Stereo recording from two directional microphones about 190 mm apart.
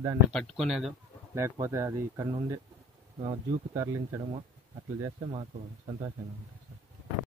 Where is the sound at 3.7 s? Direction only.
15° right (ahead or behind).